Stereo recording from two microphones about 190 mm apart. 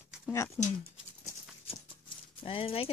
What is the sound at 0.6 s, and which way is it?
Speech, 15° left (ahead or behind).